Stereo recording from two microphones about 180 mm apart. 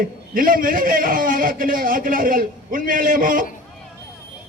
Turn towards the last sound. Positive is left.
turn(degrees=-50)  # may be behind; listen again after turning